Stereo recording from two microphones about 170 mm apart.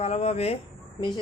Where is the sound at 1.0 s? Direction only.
25° left (ahead or behind).